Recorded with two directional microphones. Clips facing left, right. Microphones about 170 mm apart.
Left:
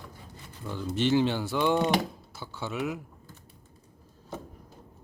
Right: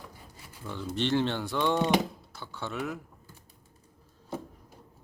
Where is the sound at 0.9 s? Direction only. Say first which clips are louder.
Left 3 dB; 5° left (ahead or behind).